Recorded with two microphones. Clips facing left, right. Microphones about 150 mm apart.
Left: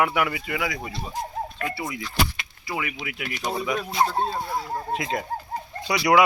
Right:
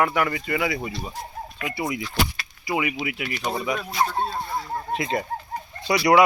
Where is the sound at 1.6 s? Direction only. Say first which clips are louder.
Right 3 dB; 20° right (ahead or behind).